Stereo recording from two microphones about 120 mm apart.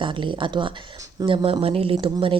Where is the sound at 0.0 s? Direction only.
45° right (ahead or behind).